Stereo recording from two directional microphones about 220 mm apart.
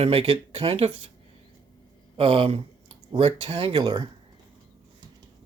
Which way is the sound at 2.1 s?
25° right (ahead or behind).